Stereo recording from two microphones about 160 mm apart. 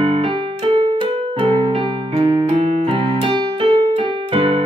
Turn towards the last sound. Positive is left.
turn(degrees=-35)  # may be behind; listen again after turning